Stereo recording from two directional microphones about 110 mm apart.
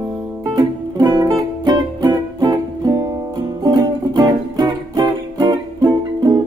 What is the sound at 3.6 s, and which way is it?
Music, 35° right (ahead or behind).